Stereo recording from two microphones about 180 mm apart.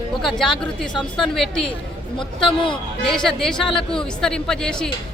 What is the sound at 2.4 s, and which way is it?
Speech, 25° left (ahead or behind).